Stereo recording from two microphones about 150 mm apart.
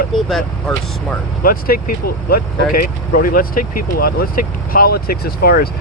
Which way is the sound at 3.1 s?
75° left (ahead or behind).